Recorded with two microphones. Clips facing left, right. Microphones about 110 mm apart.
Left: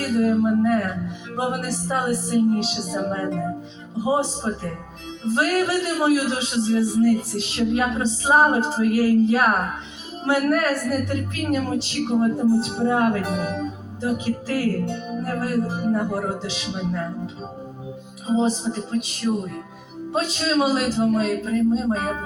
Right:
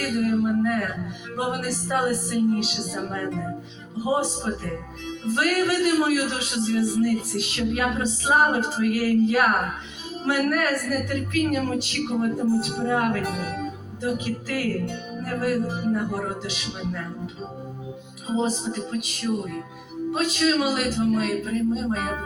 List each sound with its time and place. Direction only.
0.0 s a sound: 30° left (ahead or behind)
1.4 s a woman's voice: 30° left (ahead or behind)
18.3 s a woman's voice: 30° left (ahead or behind)